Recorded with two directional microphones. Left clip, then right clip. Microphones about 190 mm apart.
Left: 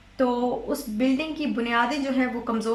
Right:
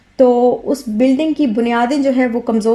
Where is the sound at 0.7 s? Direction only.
35° right (ahead or behind).